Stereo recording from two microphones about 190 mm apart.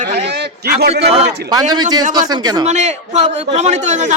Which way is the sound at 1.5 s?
20° right (ahead or behind).